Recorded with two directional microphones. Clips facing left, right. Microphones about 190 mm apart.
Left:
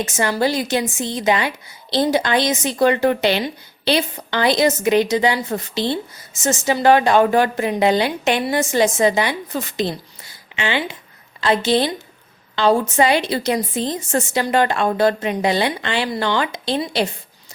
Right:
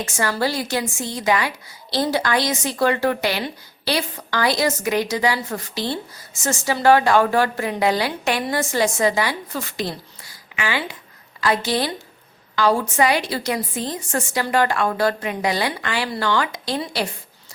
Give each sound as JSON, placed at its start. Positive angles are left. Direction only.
{"t": 0.0, "sound": "speech", "side_deg": 20}